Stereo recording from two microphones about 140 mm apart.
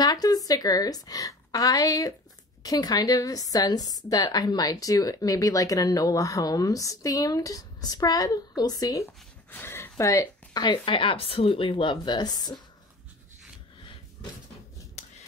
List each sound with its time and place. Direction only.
0.0 s a woman's voice: 30° left (ahead or behind)
9.5 s speech: 15° left (ahead or behind)
15.0 s a sound: 50° left (ahead or behind)